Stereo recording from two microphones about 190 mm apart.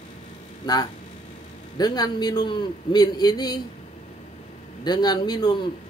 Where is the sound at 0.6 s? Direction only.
20° left (ahead or behind).